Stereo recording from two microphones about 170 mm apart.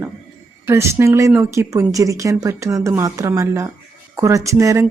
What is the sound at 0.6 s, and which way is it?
A woman's voice, 15° right (ahead or behind).